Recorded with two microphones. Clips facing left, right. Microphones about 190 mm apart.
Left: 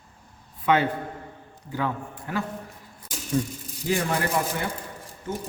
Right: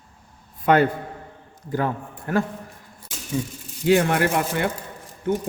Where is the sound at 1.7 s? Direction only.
50° right (ahead or behind).